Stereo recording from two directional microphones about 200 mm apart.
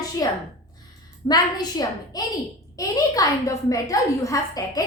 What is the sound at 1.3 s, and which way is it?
A woman's voice, 20° left (ahead or behind).